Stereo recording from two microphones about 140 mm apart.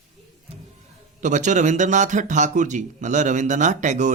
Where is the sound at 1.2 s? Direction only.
60° right (ahead or behind).